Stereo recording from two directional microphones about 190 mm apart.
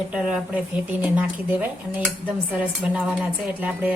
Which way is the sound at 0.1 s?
5° right (ahead or behind).